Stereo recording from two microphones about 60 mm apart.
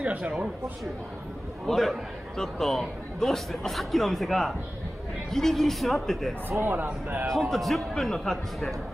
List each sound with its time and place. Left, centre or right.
0.0 s a sound: centre
1.7 s a man's voice: centre
6.6 s speech: right
7.3 s a man's voice: centre